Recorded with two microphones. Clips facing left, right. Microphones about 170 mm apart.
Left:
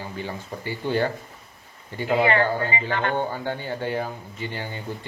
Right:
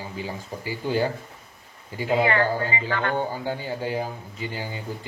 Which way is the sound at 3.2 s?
10° right (ahead or behind).